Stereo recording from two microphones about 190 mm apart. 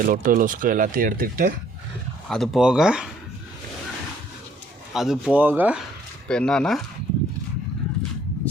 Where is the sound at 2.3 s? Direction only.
Centre (ahead or behind).